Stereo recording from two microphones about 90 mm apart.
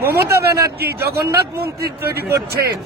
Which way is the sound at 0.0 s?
30° right (ahead or behind).